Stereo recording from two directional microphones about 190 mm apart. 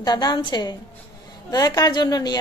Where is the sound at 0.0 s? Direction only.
20° left (ahead or behind).